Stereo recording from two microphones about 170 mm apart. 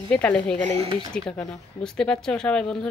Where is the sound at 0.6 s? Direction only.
40° right (ahead or behind).